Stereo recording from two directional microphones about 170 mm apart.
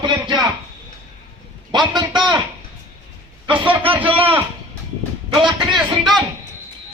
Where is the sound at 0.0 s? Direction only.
25° right (ahead or behind).